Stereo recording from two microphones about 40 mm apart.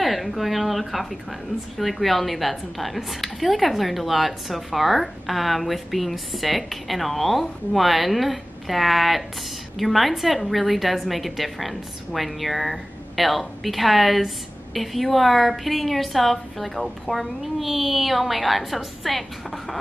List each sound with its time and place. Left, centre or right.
0.0 s a woman's voice: centre